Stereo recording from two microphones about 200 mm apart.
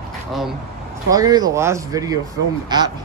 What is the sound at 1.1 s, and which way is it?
Speech, 20° right (ahead or behind).